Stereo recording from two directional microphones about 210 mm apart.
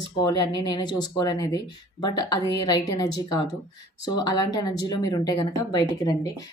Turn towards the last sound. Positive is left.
turn(degrees=15)  # may be behind; listen again after turning